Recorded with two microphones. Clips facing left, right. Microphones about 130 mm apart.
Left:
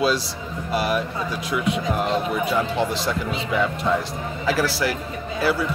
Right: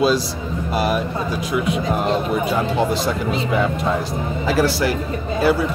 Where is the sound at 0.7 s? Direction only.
25° right (ahead or behind).